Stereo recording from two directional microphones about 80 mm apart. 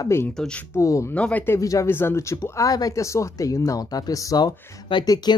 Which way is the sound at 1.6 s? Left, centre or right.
Left.